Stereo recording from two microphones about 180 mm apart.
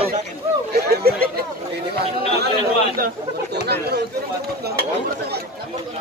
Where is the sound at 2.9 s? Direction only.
60° right (ahead or behind).